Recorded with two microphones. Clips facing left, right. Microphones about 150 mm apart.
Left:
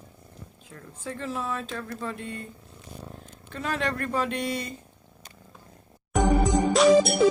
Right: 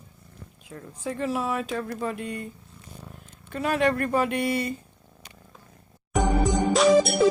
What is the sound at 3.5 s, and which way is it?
Speech, 10° right (ahead or behind).